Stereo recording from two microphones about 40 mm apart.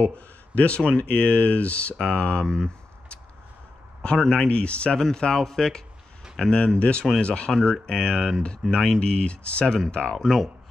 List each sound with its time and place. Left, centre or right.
0.6 s speech: left
2.4 s speech: centre
4.2 s speech: left
4.9 s speech: centre
6.8 s speech: left
10.1 s speech: centre